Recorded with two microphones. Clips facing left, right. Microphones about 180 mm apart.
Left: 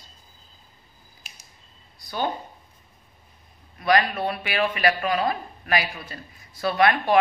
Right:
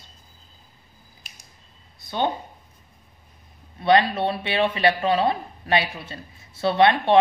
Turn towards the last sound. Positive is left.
turn(degrees=-25)  # may be behind; listen again after turning